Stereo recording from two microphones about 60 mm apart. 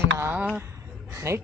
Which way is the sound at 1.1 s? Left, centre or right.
Right.